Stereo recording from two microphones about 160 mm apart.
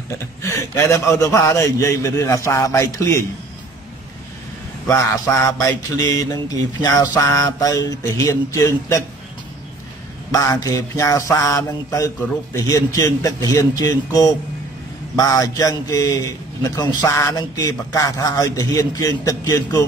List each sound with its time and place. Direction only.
0.4 s a man's voice: 15° left (ahead or behind)
4.8 s a man's voice: 20° left (ahead or behind)
10.3 s a man's voice: 20° left (ahead or behind)